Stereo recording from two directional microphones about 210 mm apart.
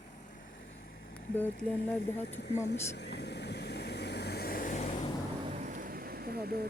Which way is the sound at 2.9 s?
55° left (ahead or behind).